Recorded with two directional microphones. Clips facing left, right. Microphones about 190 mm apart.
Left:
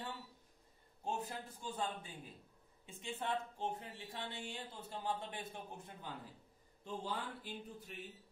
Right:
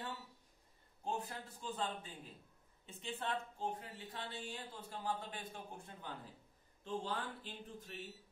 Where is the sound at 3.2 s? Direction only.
25° left (ahead or behind).